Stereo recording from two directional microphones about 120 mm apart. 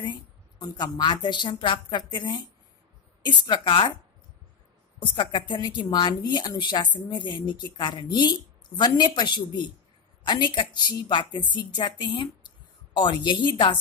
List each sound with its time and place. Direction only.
0.0 s a woman's voice: 40° left (ahead or behind)
5.0 s a woman's voice: 40° left (ahead or behind)